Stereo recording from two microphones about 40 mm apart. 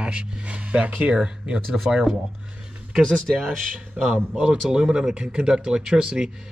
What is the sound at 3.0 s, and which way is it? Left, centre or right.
Speech, centre.